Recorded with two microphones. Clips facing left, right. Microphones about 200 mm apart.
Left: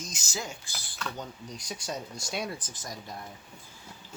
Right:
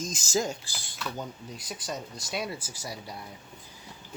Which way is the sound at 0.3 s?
40° right (ahead or behind).